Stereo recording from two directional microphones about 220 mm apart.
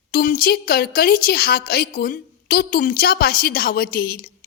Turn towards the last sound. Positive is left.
turn(degrees=40)  # may be behind; listen again after turning